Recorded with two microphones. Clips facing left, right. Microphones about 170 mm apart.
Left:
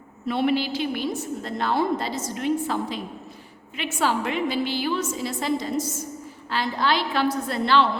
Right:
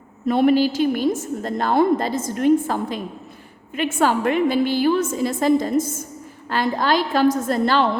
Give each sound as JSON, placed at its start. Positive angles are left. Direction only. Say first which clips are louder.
{"t": 0.3, "sound": "a woman's voice", "louder": "right 7 dB", "side_deg": -45}